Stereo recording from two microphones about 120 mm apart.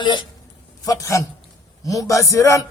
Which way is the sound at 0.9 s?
25° left (ahead or behind).